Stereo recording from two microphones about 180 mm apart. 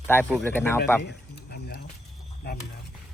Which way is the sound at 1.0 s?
60° left (ahead or behind).